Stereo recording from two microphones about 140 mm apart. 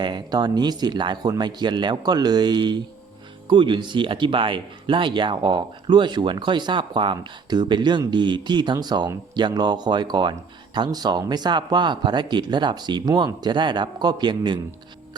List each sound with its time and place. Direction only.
0.0 s speech: 30° right (ahead or behind)